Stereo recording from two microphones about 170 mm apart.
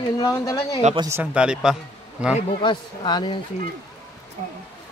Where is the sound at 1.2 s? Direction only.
5° right (ahead or behind).